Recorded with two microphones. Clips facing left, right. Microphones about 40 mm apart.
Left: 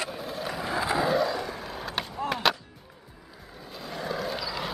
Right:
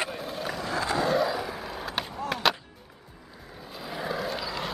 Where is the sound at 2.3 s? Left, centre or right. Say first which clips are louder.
Even; centre.